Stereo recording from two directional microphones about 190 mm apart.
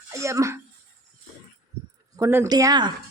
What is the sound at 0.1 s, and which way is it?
Speech, 15° right (ahead or behind).